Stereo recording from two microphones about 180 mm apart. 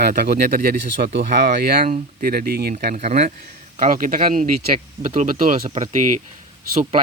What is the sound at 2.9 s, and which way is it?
Speech, 40° right (ahead or behind).